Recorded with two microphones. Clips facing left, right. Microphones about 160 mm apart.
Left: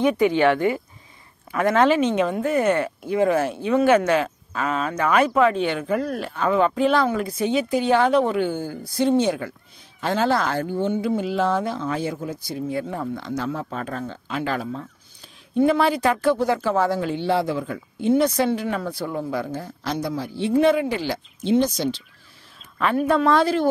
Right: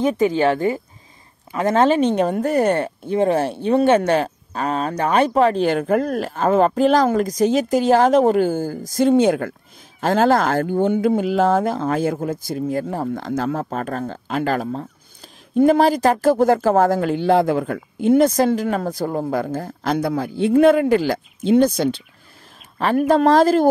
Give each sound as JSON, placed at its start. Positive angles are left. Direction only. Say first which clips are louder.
{"t": 0.2, "sound": "speech", "louder": "right 1 dB", "side_deg": -40}
{"t": 1.5, "sound": "a sound", "louder": "even", "side_deg": -25}
{"t": 1.8, "sound": "speech", "louder": "right 3 dB", "side_deg": -35}
{"t": 5.8, "sound": "speech", "louder": "right 5 dB", "side_deg": -50}
{"t": 23.0, "sound": "speech", "louder": "right 5 dB", "side_deg": -40}